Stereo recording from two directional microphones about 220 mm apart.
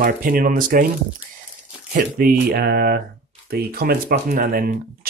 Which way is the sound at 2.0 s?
40° right (ahead or behind).